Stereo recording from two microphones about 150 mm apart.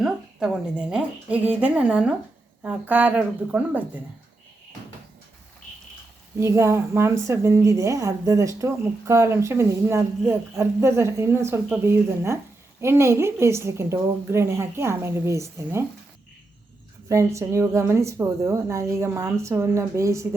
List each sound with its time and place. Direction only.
0.0 s a woman's voice: 5° right (ahead or behind)
6.4 s a woman's voice: 20° right (ahead or behind)
17.1 s a woman's voice: 20° right (ahead or behind)